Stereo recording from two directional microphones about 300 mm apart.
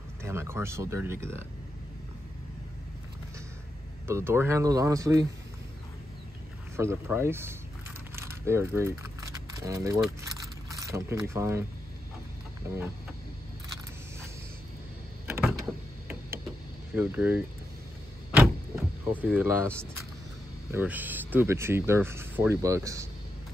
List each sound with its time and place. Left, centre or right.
0.2 s speech: centre
4.1 s speech: centre
6.8 s speech: centre
8.2 s a sound: centre
10.7 s speech: centre
15.2 s door: centre
16.9 s speech: centre
18.3 s vehicle: centre
20.7 s speech: centre